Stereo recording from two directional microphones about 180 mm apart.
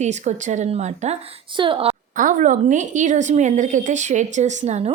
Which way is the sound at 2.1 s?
45° right (ahead or behind).